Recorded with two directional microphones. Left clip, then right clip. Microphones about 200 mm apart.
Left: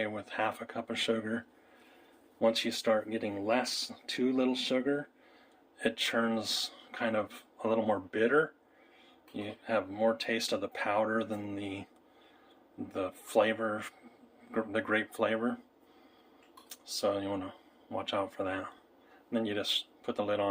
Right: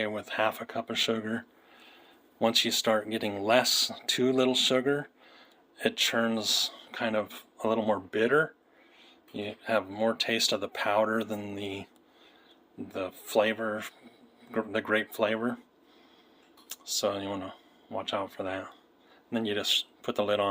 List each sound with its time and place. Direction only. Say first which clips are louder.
0.0 s speech: right 4 dB; 30° right (ahead or behind)
12.9 s speech: right 2 dB; 20° right (ahead or behind)
16.6 s speech: right 2 dB; 25° right (ahead or behind)